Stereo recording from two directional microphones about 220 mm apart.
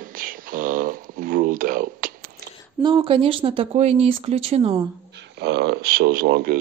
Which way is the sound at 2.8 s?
20° right (ahead or behind).